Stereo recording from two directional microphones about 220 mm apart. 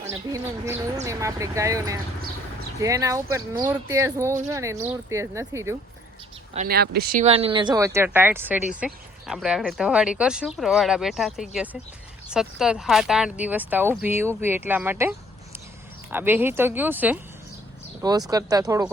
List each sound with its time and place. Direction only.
0.3 s speech: 15° right (ahead or behind)
6.7 s speech: 45° right (ahead or behind); by 17.2 s 10° right (ahead or behind)
18.0 s speech: 20° right (ahead or behind)